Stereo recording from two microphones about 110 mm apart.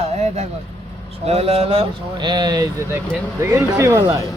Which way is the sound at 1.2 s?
65° right (ahead or behind).